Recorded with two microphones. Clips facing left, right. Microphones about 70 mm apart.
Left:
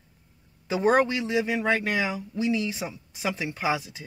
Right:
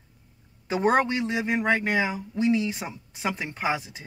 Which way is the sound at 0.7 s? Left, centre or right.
Right.